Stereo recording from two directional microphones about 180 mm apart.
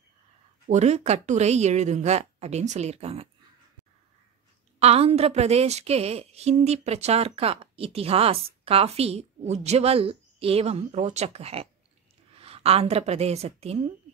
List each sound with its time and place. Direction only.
0.7 s a woman's voice: 40° right (ahead or behind)
4.7 s a woman's voice: 35° right (ahead or behind)